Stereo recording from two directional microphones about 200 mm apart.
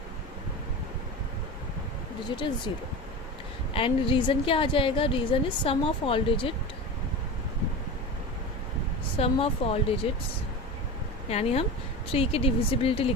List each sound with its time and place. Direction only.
2.7 s a woman's voice: 25° left (ahead or behind)
9.1 s a woman's voice: 30° left (ahead or behind)
11.3 s a woman's voice: 30° left (ahead or behind)